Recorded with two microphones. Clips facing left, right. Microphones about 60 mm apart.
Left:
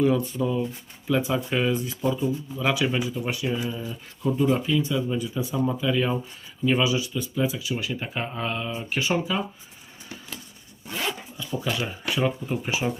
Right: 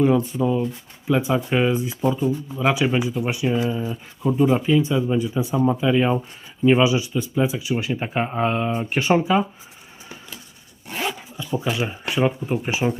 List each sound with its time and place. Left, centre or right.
0.0 s speech: centre; by 9.4 s right
11.0 s speech: right